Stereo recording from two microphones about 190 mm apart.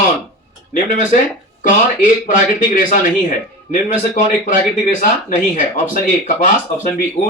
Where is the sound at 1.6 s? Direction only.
45° left (ahead or behind).